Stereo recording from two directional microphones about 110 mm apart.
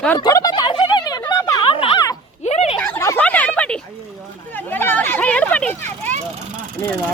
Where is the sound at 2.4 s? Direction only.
85° left.